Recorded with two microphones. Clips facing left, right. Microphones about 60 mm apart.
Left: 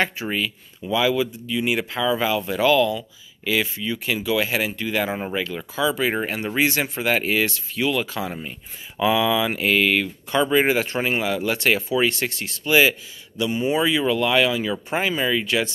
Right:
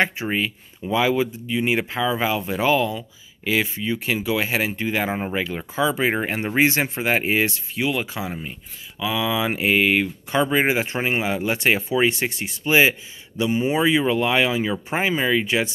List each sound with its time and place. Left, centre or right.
0.0 s speech: right
9.0 s speech: left
9.3 s speech: centre